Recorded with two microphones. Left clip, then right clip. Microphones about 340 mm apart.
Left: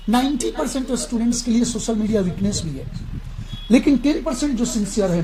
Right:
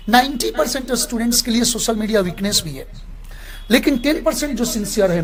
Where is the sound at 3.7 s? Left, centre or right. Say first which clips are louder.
Right 1 dB; right.